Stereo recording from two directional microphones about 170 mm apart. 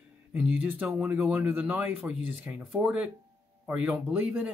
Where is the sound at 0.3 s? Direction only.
5° right (ahead or behind).